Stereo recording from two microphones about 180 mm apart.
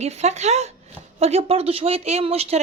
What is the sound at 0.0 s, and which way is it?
A woman's voice, 35° right (ahead or behind).